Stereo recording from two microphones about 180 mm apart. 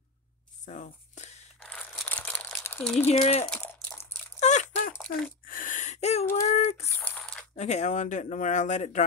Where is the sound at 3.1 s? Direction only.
35° left (ahead or behind).